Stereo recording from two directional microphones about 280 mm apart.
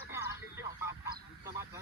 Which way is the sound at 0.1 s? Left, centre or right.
Centre.